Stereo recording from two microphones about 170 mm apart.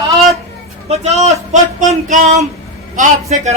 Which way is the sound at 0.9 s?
40° right (ahead or behind).